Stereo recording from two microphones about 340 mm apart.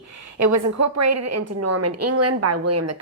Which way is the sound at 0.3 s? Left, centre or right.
Right.